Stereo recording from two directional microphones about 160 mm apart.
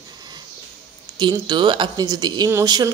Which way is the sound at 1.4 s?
30° right (ahead or behind).